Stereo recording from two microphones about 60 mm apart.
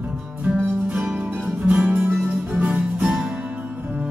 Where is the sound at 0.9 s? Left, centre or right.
Right.